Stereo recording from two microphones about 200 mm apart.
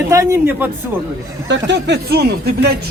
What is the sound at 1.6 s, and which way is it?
Speech, 60° right (ahead or behind).